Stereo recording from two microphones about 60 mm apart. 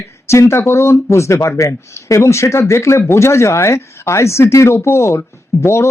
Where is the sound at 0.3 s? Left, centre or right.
Left.